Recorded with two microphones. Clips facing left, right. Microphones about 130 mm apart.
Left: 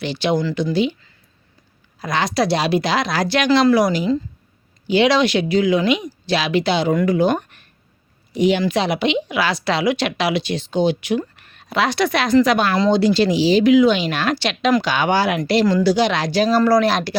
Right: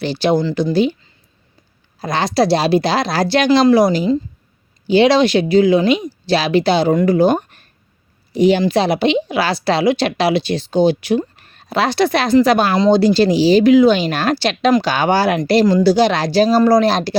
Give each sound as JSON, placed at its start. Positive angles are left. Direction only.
{"t": 0.0, "sound": "speech", "side_deg": -35}
{"t": 2.0, "sound": "a woman's voice", "side_deg": -30}